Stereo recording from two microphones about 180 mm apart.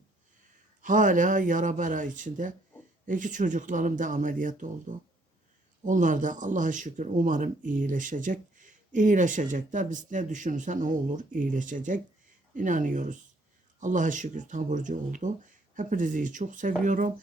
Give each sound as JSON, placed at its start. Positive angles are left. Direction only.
{"t": 0.8, "sound": "speech", "side_deg": -45}